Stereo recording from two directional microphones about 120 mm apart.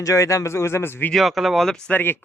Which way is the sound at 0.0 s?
25° left (ahead or behind).